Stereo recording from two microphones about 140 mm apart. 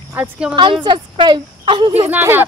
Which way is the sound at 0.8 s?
35° right (ahead or behind).